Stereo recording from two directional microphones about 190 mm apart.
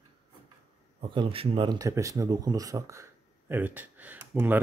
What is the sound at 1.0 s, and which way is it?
Speech, 25° right (ahead or behind).